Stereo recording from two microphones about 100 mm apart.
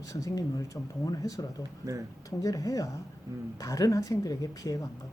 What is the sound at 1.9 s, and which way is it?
Speech, 30° right (ahead or behind).